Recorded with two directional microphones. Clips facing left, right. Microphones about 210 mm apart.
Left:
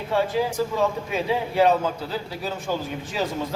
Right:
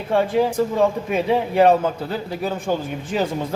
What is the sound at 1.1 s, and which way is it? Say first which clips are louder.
Speech: right 5 dB; 55° right (ahead or behind).